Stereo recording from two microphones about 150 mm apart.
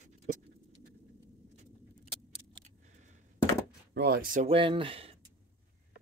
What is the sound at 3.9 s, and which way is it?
Speech, 90° right.